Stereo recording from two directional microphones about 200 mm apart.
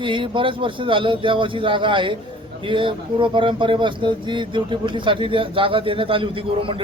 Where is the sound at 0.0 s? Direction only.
25° right (ahead or behind).